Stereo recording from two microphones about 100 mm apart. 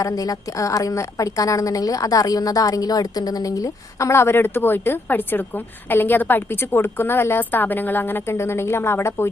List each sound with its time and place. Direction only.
0.0 s a woman's voice: 35° left (ahead or behind)